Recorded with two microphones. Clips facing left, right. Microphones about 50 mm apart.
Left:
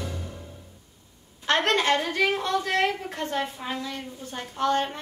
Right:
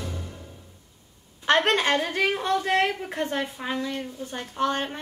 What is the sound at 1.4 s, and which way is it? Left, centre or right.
A woman's voice, right.